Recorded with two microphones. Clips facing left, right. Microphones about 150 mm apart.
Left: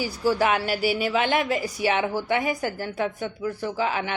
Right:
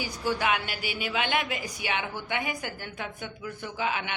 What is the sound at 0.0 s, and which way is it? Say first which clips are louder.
A woman's voice: left 6 dB; 40° left (ahead or behind).